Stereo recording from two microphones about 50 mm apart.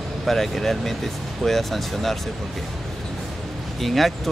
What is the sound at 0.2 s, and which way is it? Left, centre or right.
Speech, centre.